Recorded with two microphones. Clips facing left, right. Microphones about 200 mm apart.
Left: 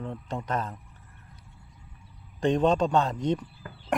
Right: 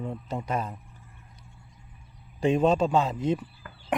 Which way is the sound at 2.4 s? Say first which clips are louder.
Right 1 dB; 5° right (ahead or behind).